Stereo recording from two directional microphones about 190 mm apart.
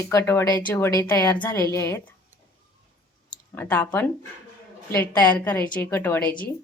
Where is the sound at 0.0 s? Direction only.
15° left (ahead or behind).